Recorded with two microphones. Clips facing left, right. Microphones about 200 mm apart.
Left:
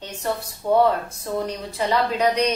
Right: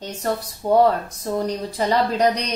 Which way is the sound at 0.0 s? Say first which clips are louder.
Right 2 dB; 35° right (ahead or behind).